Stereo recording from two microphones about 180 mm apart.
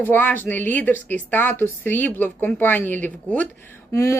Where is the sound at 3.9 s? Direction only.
15° left (ahead or behind).